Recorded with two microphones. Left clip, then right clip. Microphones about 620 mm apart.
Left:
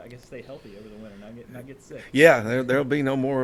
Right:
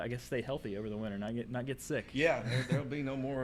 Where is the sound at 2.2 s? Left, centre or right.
Left.